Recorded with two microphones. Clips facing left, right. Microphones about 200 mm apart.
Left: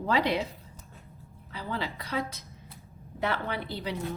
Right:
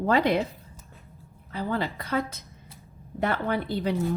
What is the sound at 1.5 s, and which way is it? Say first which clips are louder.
A woman's voice: right 6 dB; 50° right (ahead or behind).